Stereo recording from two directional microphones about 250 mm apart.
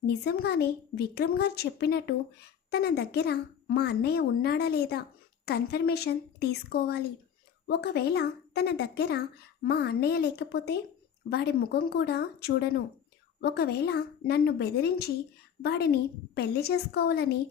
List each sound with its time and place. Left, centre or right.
0.1 s speech: left